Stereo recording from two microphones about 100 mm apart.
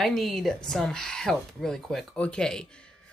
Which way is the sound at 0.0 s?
Centre (ahead or behind).